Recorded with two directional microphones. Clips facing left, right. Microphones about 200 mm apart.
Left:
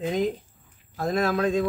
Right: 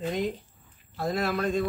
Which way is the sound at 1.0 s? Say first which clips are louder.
Left 4 dB; 45° left (ahead or behind).